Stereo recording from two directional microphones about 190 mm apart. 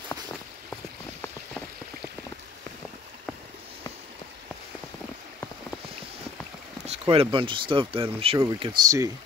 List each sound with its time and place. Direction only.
1.2 s rain: 5° left (ahead or behind)
6.9 s speech: 30° right (ahead or behind)